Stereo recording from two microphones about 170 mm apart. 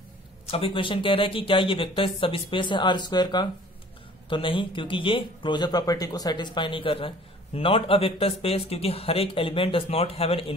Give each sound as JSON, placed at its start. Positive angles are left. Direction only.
{"t": 0.5, "sound": "speech", "side_deg": 30}